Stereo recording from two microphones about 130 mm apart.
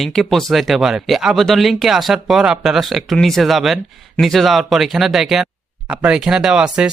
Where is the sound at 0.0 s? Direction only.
Centre (ahead or behind).